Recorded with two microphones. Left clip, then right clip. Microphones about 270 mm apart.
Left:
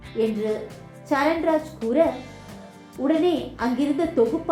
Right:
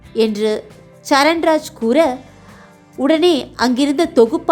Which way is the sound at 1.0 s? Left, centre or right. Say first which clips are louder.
Right 9 dB; right.